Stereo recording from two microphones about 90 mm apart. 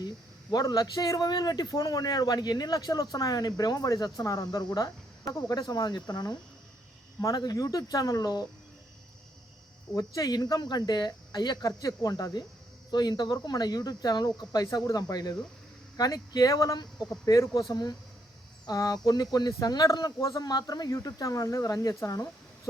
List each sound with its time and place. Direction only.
0.5 s speech: 45° left (ahead or behind)
9.9 s speech: 40° left (ahead or behind)